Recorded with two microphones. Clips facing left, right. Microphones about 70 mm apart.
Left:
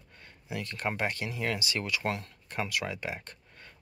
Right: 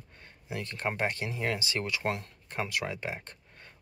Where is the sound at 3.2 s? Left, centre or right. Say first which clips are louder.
Even; right.